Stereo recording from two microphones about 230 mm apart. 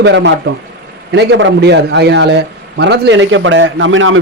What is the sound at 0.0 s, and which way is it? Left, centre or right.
A man's voice, right.